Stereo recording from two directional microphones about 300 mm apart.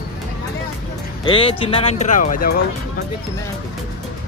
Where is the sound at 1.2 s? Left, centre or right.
Centre.